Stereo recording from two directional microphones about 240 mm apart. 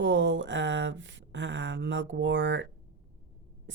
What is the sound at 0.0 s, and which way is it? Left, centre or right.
Speech, right.